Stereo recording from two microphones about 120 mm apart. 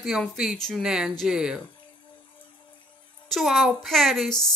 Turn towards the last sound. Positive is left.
turn(degrees=0)  # may be behind; listen again after turning